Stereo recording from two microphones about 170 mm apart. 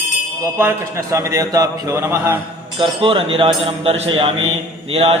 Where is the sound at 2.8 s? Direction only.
30° right (ahead or behind).